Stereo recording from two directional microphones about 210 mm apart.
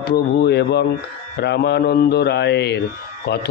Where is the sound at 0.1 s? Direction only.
50° left (ahead or behind).